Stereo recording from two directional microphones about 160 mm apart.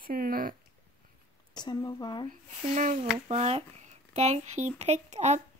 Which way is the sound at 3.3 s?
40° right (ahead or behind).